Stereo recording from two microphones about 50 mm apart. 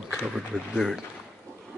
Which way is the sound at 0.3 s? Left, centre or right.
Centre.